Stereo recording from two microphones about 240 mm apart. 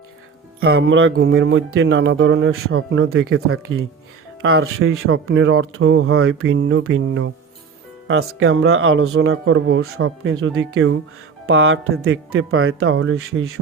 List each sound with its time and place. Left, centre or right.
0.6 s speech: right